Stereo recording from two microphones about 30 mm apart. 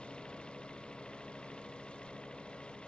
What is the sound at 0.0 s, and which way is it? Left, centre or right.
Engine, left.